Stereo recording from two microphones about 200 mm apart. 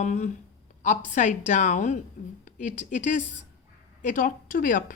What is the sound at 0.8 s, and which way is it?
Speech, 40° left (ahead or behind).